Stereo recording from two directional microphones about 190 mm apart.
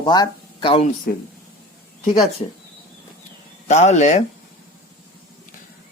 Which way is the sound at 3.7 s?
35° left (ahead or behind).